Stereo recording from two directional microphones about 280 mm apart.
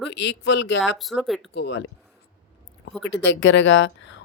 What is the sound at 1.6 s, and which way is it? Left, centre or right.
Speech, left.